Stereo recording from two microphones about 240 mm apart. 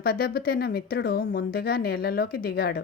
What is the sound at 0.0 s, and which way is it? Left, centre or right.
Speech, left.